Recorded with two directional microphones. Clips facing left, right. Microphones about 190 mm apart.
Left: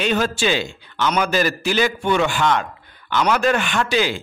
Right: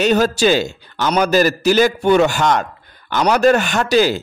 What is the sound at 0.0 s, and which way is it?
A man's voice, 40° right (ahead or behind).